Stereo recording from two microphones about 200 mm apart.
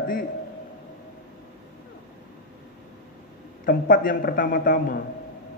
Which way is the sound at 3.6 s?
45° left (ahead or behind).